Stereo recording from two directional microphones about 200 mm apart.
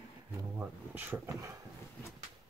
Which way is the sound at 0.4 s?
10° right (ahead or behind).